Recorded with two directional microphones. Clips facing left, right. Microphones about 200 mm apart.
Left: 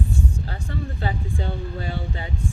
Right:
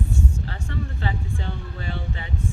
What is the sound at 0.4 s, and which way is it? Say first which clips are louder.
Speech: left 1 dB; 35° left (ahead or behind).